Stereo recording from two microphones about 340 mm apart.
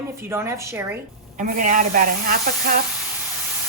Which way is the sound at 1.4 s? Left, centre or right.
Right.